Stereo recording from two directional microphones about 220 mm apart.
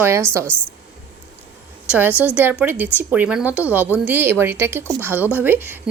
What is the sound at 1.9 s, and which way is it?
A woman's voice, 5° right (ahead or behind).